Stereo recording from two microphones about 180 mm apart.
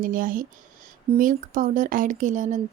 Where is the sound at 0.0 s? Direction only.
50° right (ahead or behind).